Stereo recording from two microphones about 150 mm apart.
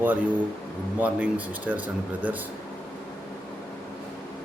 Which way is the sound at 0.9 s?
10° right (ahead or behind).